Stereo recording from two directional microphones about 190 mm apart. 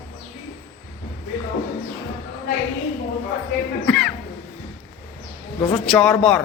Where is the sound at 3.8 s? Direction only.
5° left (ahead or behind).